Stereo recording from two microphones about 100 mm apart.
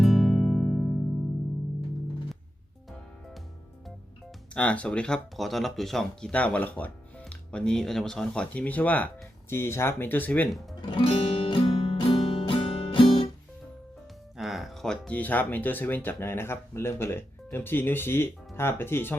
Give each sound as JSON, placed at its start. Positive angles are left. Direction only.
{"t": 0.0, "sound": "music", "side_deg": 0}
{"t": 4.5, "sound": "speech", "side_deg": 10}
{"t": 6.3, "sound": "speech", "side_deg": 15}
{"t": 10.8, "sound": "music", "side_deg": 60}
{"t": 14.3, "sound": "speech", "side_deg": 0}